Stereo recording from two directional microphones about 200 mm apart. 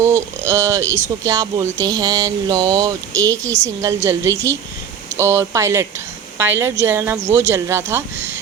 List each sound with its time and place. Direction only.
0.0 s speech: 15° right (ahead or behind)